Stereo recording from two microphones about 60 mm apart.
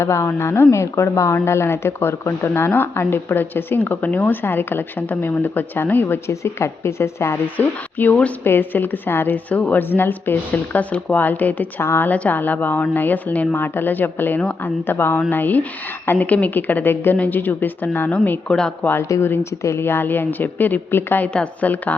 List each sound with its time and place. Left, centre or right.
0.0 s speech: left
6.2 s speech: left
7.4 s speech: left
10.5 s speech: left
11.8 s speech: left
12.0 s speech: left
18.4 s speech: centre
19.1 s speech: left
19.6 s speech: left